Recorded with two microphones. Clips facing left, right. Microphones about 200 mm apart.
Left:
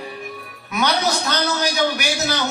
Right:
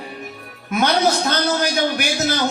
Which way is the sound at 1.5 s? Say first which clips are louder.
Right 1 dB; 50° right (ahead or behind).